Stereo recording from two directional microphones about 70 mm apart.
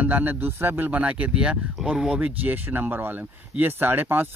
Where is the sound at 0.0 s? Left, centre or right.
Right.